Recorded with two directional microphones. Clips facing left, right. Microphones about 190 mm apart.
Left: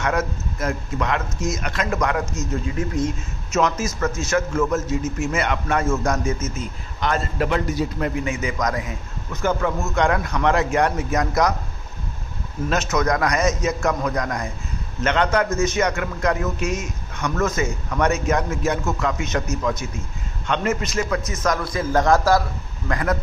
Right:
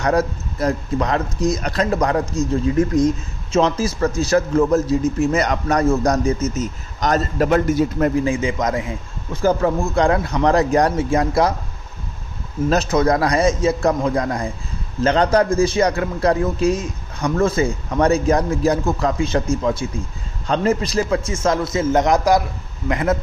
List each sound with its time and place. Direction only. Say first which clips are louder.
0.0 s a man's voice: right 5 dB; 35° right (ahead or behind)
8.2 s a man's voice: right 5 dB; 30° right (ahead or behind)
12.6 s a man's voice: right 5 dB; 35° right (ahead or behind)